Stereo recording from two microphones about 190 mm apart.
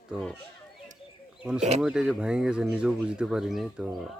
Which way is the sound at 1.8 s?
5° right (ahead or behind).